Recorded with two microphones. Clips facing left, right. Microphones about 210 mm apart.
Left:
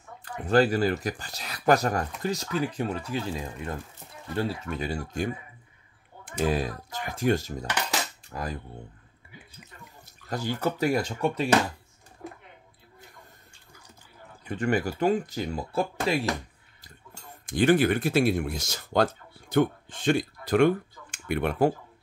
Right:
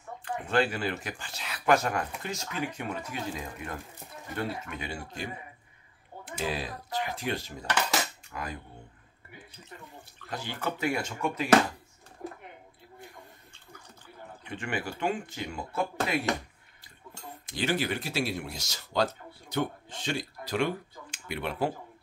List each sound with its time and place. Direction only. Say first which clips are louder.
0.2 s speech: left 5 dB; 40° left (ahead or behind)
10.3 s speech: left 6 dB; 40° left (ahead or behind)
14.4 s speech: left 8 dB; 40° left (ahead or behind)
17.5 s speech: left 9 dB; 50° left (ahead or behind)